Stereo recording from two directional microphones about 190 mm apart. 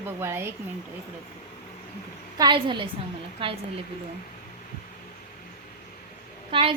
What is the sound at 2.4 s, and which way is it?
Speech, 25° right (ahead or behind).